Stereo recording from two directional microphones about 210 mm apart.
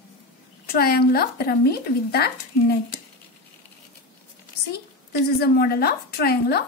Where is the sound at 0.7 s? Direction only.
45° left (ahead or behind).